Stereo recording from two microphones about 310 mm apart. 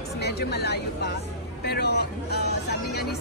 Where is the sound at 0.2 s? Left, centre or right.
Left.